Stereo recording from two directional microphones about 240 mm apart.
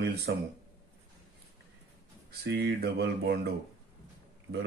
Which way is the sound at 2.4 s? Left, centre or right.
Right.